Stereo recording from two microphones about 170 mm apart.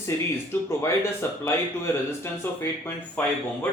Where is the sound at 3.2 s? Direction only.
5° left (ahead or behind).